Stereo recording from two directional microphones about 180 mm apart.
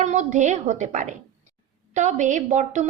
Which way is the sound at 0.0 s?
40° right (ahead or behind).